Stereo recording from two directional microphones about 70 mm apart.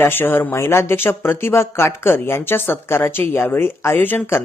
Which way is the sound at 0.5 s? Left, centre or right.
Left.